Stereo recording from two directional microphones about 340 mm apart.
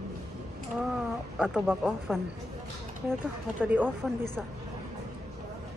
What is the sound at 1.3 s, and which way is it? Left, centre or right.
Speech, centre.